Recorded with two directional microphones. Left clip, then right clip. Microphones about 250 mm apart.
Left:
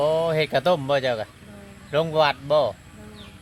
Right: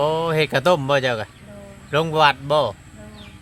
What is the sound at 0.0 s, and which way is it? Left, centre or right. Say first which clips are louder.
Speech: right 1 dB; right.